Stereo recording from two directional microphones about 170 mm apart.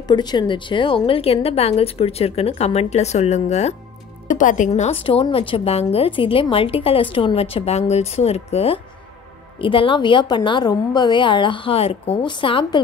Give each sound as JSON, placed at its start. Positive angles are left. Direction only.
{"t": 0.1, "sound": "a woman's voice", "side_deg": 25}